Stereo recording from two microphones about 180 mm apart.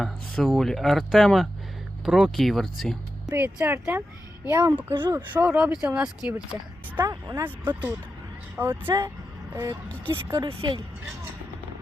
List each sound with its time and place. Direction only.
0.0 s speech: centre (ahead or behind)
7.0 s speech: 20° right (ahead or behind)
10.4 s speech: 25° right (ahead or behind)